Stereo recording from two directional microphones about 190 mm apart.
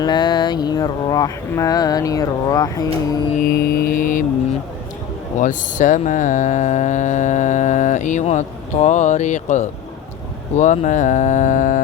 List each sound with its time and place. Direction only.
0.0 s a sound: 20° left (ahead or behind)
3.4 s mantra: 55° left (ahead or behind)
5.4 s mantra: 40° left (ahead or behind)